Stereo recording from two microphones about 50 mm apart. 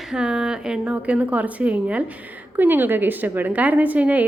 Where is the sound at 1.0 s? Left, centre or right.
Right.